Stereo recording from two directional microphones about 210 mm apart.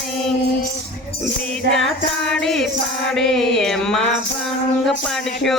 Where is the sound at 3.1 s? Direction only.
Centre (ahead or behind).